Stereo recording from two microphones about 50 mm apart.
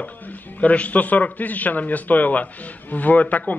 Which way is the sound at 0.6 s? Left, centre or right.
Left.